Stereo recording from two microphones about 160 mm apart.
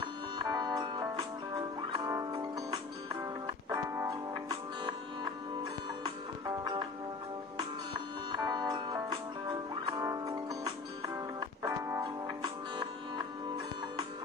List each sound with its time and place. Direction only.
0.4 s music: 25° right (ahead or behind)
3.4 s music: 20° right (ahead or behind)